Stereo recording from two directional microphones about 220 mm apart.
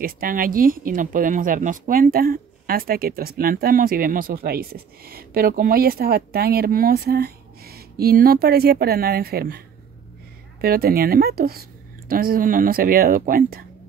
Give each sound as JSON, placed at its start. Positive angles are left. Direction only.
{"t": 0.0, "sound": "speech", "side_deg": -40}
{"t": 10.6, "sound": "speech", "side_deg": -45}